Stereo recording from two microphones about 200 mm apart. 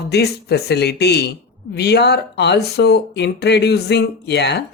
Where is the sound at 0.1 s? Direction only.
55° left (ahead or behind).